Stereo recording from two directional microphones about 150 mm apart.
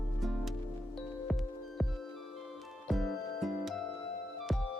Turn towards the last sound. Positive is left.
turn(degrees=0)  # may be behind; listen again after turning